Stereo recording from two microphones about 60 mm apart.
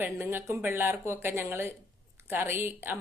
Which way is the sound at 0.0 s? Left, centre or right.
Right.